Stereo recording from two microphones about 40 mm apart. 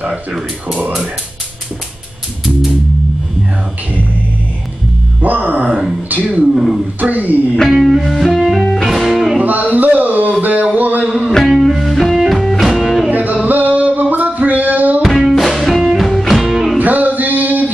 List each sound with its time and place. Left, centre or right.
0.0 s speech: right
5.2 s music: right
6.0 s speech: right
6.5 s speech: centre
7.0 s speech: right
7.9 s music: centre
9.4 s a sound: right
11.1 s music: right
11.3 s music: centre
13.1 s music: right
15.0 s music: centre
16.7 s music: right